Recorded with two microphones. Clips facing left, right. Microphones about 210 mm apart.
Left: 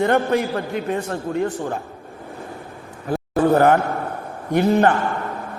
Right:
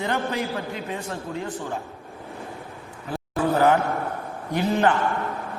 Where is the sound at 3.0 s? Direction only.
55° left (ahead or behind).